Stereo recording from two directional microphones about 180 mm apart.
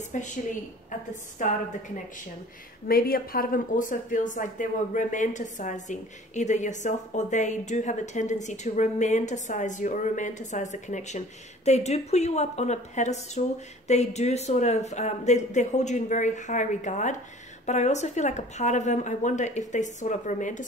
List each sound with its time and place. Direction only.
0.1 s a woman's voice: 45° left (ahead or behind)
1.4 s a woman's voice: 45° left (ahead or behind)
2.9 s a woman's voice: 55° left (ahead or behind)